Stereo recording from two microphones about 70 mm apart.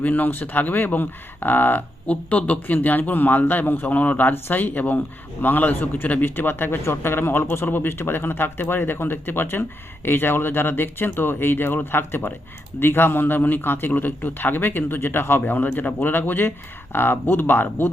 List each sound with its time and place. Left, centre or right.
0.0 s a man's voice: left